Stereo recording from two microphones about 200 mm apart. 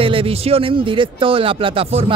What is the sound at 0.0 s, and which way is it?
A man's voice, 25° right (ahead or behind).